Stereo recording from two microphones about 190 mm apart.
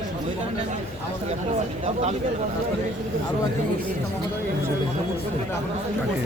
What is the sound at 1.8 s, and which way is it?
Speech, 35° right (ahead or behind).